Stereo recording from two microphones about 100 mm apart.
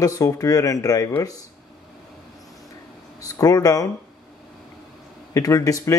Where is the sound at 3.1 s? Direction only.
35° left (ahead or behind).